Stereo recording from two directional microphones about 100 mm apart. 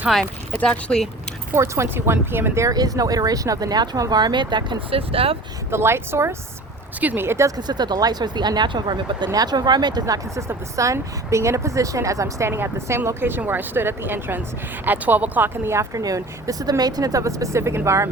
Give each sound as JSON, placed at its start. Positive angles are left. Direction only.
{"t": 0.6, "sound": "speech", "side_deg": 10}
{"t": 1.5, "sound": "speech", "side_deg": -30}
{"t": 2.6, "sound": "speech", "side_deg": -40}
{"t": 4.9, "sound": "speech", "side_deg": -70}
{"t": 5.7, "sound": "speech", "side_deg": -25}
{"t": 7.5, "sound": "speech", "side_deg": -45}
{"t": 10.3, "sound": "speech", "side_deg": -30}